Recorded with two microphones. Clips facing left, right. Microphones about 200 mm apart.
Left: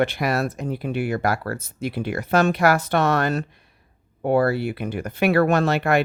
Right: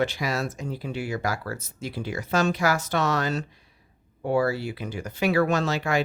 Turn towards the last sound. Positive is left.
turn(degrees=60)  # may be behind; listen again after turning